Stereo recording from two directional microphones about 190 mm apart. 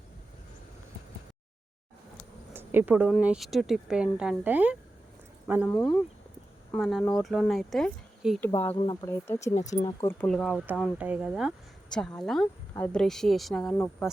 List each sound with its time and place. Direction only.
2.5 s speech: 10° right (ahead or behind)
5.6 s speech: 5° left (ahead or behind)
8.4 s speech: 10° left (ahead or behind)
8.7 s speech: 25° left (ahead or behind)
9.6 s speech: 40° left (ahead or behind)
9.8 s speech: 15° left (ahead or behind)
10.9 s speech: 5° right (ahead or behind)